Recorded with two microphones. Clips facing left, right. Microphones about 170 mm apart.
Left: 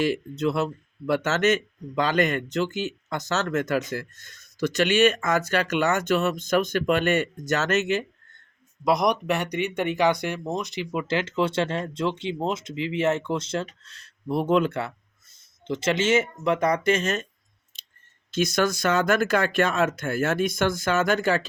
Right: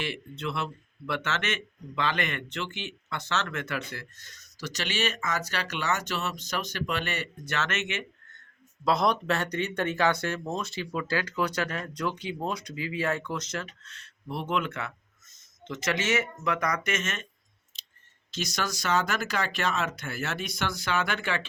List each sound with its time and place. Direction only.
0.0 s speech: 40° left (ahead or behind)
8.8 s speech: 15° left (ahead or behind); by 17.2 s 35° left (ahead or behind)
17.7 s clicking: 55° left (ahead or behind)
18.3 s speech: 55° left (ahead or behind)